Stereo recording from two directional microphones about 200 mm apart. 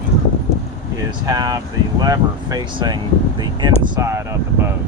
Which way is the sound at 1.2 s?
20° right (ahead or behind).